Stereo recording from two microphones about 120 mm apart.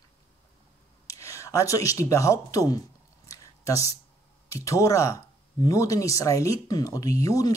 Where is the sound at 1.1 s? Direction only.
25° left (ahead or behind).